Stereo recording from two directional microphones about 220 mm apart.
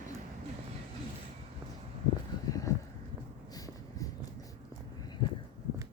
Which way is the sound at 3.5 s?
15° left (ahead or behind).